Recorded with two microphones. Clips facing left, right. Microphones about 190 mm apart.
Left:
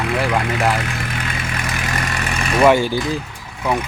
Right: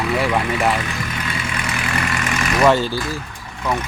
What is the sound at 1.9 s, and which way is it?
Vehicle, 35° left (ahead or behind).